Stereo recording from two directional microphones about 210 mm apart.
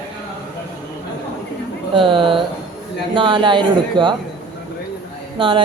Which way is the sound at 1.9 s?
25° right (ahead or behind).